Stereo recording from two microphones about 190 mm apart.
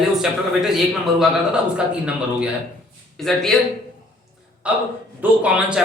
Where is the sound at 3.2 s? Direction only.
Centre (ahead or behind).